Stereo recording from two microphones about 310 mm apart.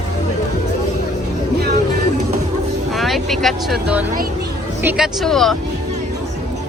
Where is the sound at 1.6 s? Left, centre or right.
Right.